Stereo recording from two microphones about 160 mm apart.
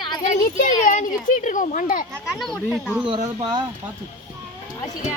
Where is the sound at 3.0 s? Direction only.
30° right (ahead or behind).